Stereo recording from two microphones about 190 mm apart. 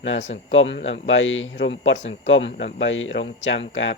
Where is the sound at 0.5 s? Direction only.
85° left.